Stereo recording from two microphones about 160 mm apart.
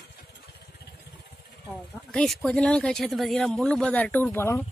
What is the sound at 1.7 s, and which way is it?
Speech, 5° left (ahead or behind).